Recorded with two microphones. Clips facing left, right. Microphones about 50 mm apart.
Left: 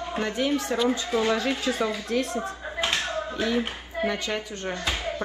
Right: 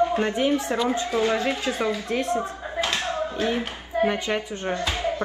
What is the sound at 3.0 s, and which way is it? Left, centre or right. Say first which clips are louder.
Clapping: right 2 dB; right.